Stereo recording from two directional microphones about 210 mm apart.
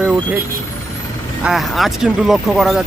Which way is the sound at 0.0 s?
5° right (ahead or behind).